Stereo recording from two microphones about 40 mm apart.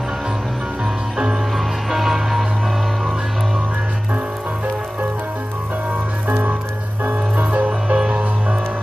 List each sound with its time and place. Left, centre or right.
1.1 s music: centre
7.3 s music: right